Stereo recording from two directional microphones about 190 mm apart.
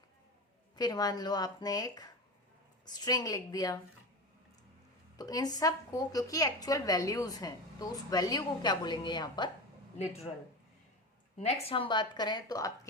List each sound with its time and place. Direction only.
0.8 s a woman's voice: 20° left (ahead or behind)
5.1 s a woman's voice: 20° left (ahead or behind)
10.0 s speech: 35° left (ahead or behind)
11.3 s a woman's voice: 35° left (ahead or behind); by 12.9 s 20° left (ahead or behind)